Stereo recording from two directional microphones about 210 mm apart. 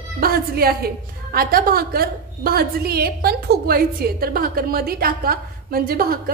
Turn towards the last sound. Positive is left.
turn(degrees=-45)  # may be behind; listen again after turning